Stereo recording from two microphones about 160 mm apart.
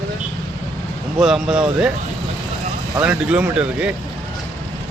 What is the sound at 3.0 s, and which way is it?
Speech, 5° right (ahead or behind).